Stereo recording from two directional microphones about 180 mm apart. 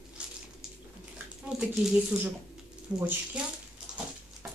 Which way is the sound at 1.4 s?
5° right (ahead or behind).